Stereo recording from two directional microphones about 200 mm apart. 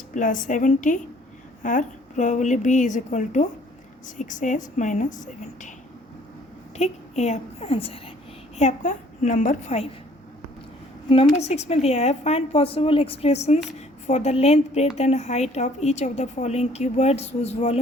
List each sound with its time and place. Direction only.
0.1 s a woman's voice: 40° left (ahead or behind)
6.7 s a woman's voice: 35° left (ahead or behind)
11.1 s a woman's voice: 25° left (ahead or behind)